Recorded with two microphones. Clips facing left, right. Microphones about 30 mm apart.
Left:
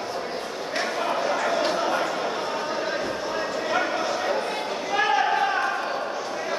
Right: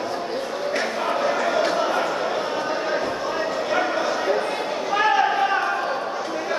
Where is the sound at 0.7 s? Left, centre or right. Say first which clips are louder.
Right 1 dB; centre.